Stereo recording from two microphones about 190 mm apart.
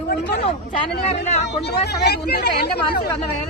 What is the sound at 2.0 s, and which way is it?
Speech, 60° left (ahead or behind).